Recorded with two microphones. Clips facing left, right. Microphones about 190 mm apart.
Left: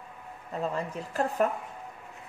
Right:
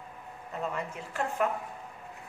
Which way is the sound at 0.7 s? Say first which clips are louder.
Left 4 dB; 35° left (ahead or behind).